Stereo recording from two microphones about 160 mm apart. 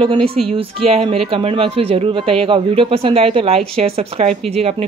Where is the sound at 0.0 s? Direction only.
35° right (ahead or behind).